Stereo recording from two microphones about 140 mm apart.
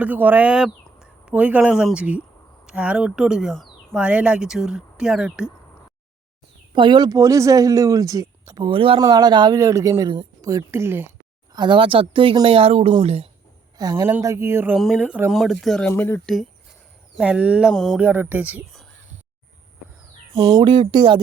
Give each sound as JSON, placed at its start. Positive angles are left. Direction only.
{"t": 0.0, "sound": "speech", "side_deg": -10}
{"t": 6.7, "sound": "speech", "side_deg": -35}
{"t": 9.0, "sound": "speech", "side_deg": -30}
{"t": 11.5, "sound": "speech", "side_deg": -35}
{"t": 13.7, "sound": "speech", "side_deg": -25}
{"t": 14.8, "sound": "speech", "side_deg": 0}
{"t": 15.9, "sound": "speech", "side_deg": 15}
{"t": 17.2, "sound": "speech", "side_deg": -10}
{"t": 18.0, "sound": "speech", "side_deg": -10}
{"t": 20.4, "sound": "speech", "side_deg": -25}
{"t": 20.7, "sound": "speech", "side_deg": -40}